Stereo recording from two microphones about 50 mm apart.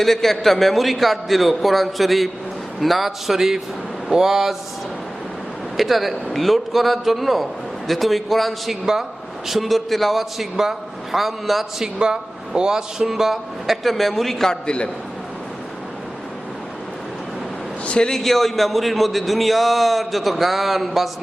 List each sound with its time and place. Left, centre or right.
0.0 s a man's voice: centre
5.7 s a man's voice: centre
11.9 s a man's voice: centre
17.8 s a sound: left
18.1 s a man's voice: centre